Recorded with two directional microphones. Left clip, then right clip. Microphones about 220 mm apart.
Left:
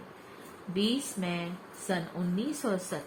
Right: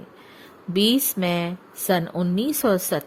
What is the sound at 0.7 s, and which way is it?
Speech, 45° right (ahead or behind).